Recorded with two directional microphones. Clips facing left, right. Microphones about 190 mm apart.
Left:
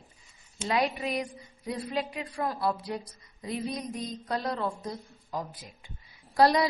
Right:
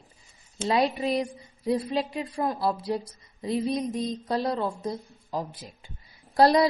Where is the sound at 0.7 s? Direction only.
30° right (ahead or behind).